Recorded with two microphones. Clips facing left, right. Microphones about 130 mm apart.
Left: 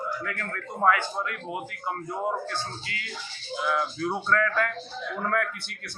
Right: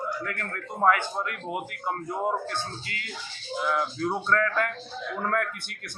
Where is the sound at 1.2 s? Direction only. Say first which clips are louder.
Right 1 dB; centre (ahead or behind).